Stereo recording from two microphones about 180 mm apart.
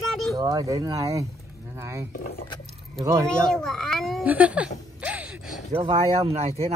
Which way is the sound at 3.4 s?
5° left (ahead or behind).